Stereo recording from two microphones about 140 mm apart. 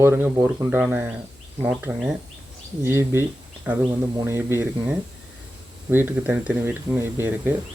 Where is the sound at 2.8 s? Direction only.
20° right (ahead or behind).